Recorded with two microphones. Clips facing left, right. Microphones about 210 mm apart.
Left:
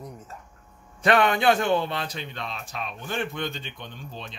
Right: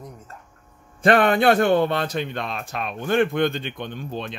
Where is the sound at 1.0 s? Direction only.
50° right (ahead or behind).